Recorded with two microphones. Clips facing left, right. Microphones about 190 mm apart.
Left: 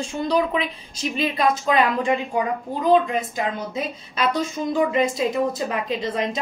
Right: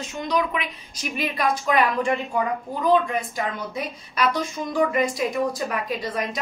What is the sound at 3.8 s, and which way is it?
Speech, 25° left (ahead or behind).